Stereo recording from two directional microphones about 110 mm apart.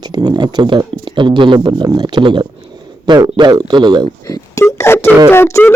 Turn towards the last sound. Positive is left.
turn(degrees=20)  # may be behind; listen again after turning